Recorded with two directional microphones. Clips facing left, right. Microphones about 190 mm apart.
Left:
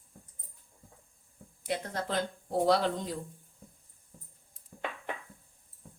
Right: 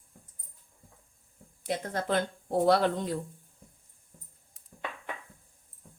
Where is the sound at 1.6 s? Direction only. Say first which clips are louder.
Right 2 dB; 55° right (ahead or behind).